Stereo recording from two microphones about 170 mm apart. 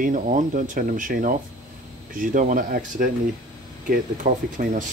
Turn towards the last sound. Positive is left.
turn(degrees=-50)  # may be behind; listen again after turning